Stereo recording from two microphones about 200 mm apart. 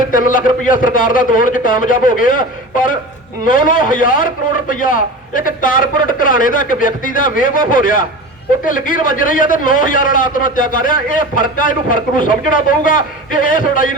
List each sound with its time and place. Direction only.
0.1 s a man's voice: 45° left (ahead or behind)